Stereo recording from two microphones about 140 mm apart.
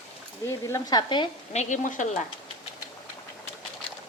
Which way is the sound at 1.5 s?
65° left (ahead or behind).